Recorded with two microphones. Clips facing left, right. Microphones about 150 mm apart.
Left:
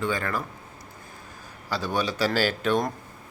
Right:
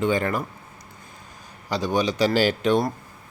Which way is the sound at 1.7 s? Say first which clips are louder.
Right 4 dB; 15° right (ahead or behind).